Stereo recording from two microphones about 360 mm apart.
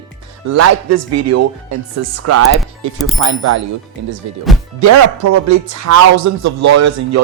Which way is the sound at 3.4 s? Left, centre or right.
Right.